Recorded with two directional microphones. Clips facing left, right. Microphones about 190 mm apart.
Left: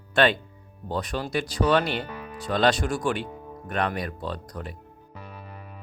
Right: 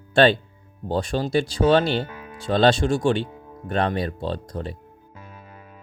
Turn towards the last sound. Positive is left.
turn(degrees=-30)  # may be behind; listen again after turning